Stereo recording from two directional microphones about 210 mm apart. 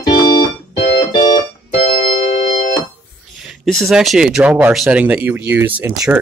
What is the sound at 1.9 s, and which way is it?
Organ, 40° left (ahead or behind).